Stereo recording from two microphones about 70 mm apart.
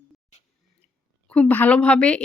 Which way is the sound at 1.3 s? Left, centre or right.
Left.